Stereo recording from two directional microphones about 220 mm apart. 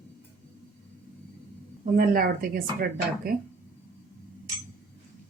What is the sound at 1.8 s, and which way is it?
Speech, 40° right (ahead or behind).